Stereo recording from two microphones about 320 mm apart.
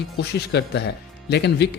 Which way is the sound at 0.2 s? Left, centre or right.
Left.